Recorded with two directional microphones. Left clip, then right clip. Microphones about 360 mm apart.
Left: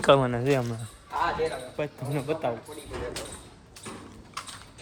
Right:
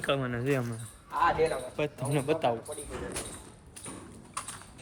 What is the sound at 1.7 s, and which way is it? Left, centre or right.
Speech, centre.